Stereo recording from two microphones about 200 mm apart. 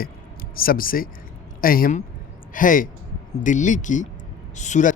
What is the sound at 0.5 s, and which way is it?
A man's voice, 45° left (ahead or behind).